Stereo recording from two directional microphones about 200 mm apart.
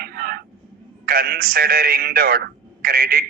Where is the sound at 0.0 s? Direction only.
50° right (ahead or behind).